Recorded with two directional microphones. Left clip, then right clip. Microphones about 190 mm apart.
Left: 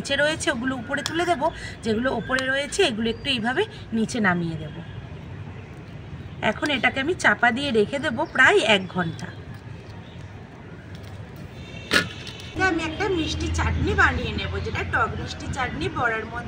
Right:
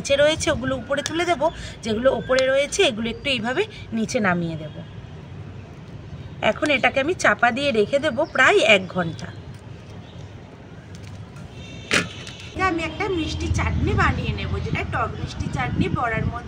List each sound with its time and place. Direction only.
0.0 s speech: 20° right (ahead or behind)
6.4 s speech: 20° right (ahead or behind)
12.5 s a woman's voice: 15° right (ahead or behind)